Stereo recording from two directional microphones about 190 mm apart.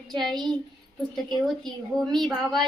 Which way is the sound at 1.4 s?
Centre (ahead or behind).